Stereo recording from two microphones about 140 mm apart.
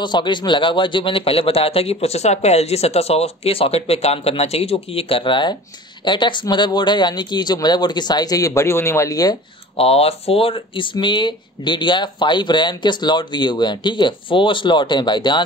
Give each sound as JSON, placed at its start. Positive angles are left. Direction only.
{"t": 0.0, "sound": "a man's voice", "side_deg": 35}
{"t": 9.8, "sound": "speech", "side_deg": 45}